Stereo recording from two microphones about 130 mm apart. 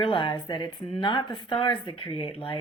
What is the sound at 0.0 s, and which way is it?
Speech, 40° left (ahead or behind).